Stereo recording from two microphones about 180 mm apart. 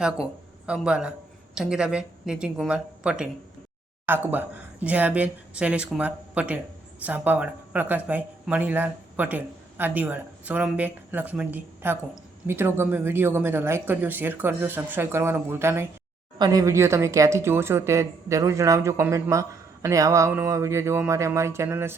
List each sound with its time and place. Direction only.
0.0 s speech: 5° right (ahead or behind)